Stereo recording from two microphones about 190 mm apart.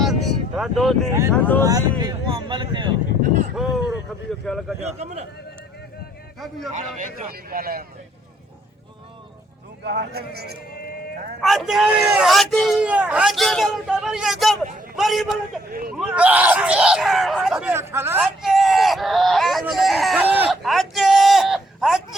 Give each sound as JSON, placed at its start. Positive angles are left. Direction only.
{"t": 0.0, "sound": "a sound", "side_deg": 0}
{"t": 1.3, "sound": "speech", "side_deg": 10}
{"t": 1.6, "sound": "speech", "side_deg": -20}
{"t": 3.5, "sound": "a sound", "side_deg": 0}
{"t": 4.4, "sound": "speech", "side_deg": 5}
{"t": 6.7, "sound": "speech", "side_deg": -40}
{"t": 9.8, "sound": "speech", "side_deg": -60}
{"t": 11.3, "sound": "speech", "side_deg": 0}